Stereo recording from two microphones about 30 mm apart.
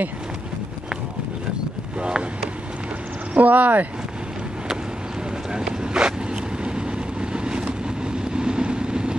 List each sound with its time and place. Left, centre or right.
2.0 s speech: right
3.3 s speech: right
5.5 s vehicle: right